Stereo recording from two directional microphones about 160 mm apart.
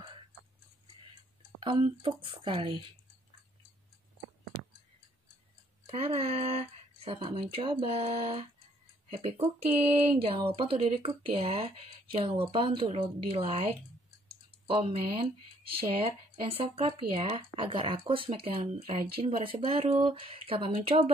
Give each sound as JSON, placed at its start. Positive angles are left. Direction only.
{"t": 1.6, "sound": "speech", "side_deg": -35}
{"t": 5.9, "sound": "speech", "side_deg": -40}
{"t": 14.7, "sound": "speech", "side_deg": -35}